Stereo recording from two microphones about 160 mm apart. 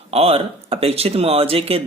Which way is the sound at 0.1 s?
40° right (ahead or behind).